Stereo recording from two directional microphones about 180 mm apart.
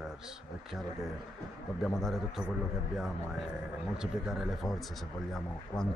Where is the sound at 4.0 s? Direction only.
5° right (ahead or behind).